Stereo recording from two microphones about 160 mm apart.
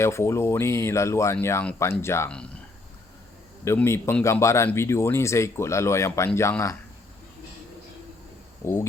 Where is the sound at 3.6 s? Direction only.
15° left (ahead or behind).